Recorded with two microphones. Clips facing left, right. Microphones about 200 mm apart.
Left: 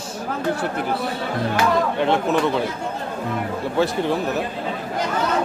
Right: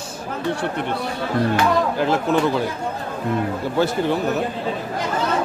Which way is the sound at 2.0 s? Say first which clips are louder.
Even; centre (ahead or behind).